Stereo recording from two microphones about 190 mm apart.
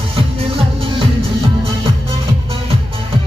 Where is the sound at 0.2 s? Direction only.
30° right (ahead or behind).